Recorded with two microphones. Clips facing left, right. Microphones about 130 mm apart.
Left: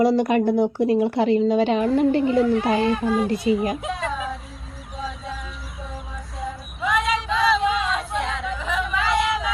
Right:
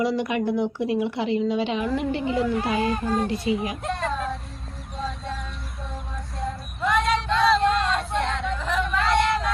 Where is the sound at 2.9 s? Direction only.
Centre (ahead or behind).